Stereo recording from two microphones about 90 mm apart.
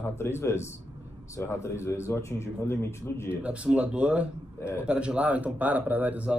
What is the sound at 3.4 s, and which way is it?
Speech, 15° right (ahead or behind).